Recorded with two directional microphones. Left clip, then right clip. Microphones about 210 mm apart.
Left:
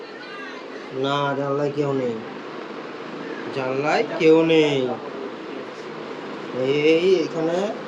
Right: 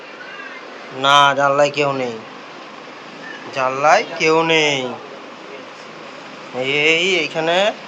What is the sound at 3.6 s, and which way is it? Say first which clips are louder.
A man's voice: right 8 dB; 5° left (ahead or behind).